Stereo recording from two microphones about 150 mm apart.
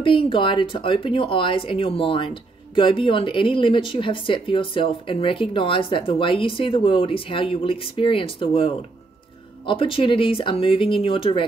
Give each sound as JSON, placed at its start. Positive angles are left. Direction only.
{"t": 0.0, "sound": "speech", "side_deg": 35}